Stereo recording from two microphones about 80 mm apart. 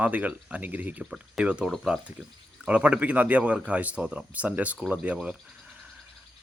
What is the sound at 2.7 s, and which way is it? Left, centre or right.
Speech, centre.